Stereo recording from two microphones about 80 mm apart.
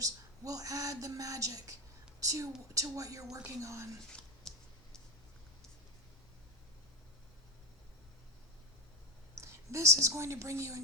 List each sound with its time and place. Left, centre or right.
0.0 s a woman's voice: right
4.1 s a sound: centre
9.3 s speech: right